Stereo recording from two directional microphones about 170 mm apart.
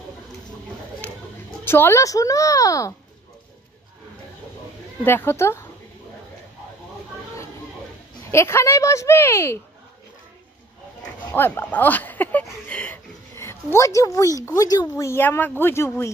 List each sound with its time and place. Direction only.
1.6 s speech: 15° left (ahead or behind)
5.0 s a woman's voice: 15° left (ahead or behind)
8.3 s a woman's voice: 15° left (ahead or behind)
11.3 s speech: 10° left (ahead or behind)